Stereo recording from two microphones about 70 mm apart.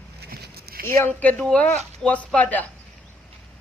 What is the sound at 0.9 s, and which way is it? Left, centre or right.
Speech, left.